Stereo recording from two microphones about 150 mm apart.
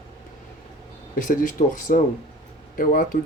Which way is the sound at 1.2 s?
60° left (ahead or behind).